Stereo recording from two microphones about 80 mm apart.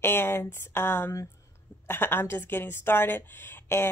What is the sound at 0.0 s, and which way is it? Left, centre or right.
A woman's voice, left.